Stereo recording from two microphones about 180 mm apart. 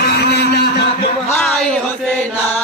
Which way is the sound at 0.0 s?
65° left (ahead or behind).